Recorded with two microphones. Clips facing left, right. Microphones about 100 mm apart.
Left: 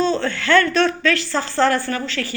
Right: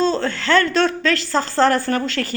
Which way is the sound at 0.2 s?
30° right (ahead or behind).